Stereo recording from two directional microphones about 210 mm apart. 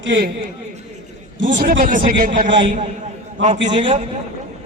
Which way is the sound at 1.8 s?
40° right (ahead or behind).